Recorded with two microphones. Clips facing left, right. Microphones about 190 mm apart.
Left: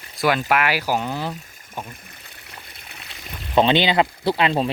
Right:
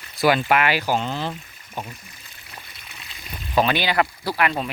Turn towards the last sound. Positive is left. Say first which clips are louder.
# left 4 dB
turn(degrees=25)  # may be behind; listen again after turning